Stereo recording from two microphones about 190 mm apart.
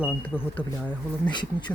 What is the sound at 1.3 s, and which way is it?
Speech, 25° left (ahead or behind).